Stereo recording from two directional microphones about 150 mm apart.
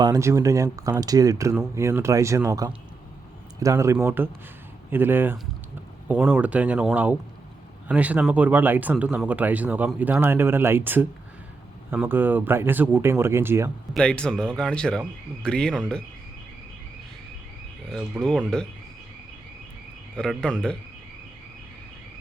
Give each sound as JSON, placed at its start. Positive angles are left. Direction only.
{"t": 0.0, "sound": "speech", "side_deg": -20}
{"t": 13.9, "sound": "speech", "side_deg": 5}
{"t": 18.2, "sound": "speech", "side_deg": 5}
{"t": 20.1, "sound": "speech", "side_deg": 5}